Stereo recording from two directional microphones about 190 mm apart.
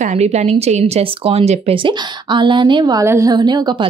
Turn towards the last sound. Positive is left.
turn(degrees=-20)  # may be behind; listen again after turning